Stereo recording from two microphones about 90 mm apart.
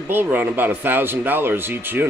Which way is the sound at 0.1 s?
20° right (ahead or behind).